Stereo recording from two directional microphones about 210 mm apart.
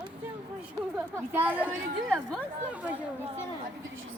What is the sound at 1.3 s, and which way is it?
Speech, 10° right (ahead or behind).